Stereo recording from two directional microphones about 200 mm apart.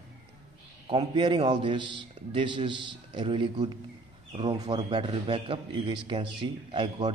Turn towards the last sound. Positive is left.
turn(degrees=-25)  # may be behind; listen again after turning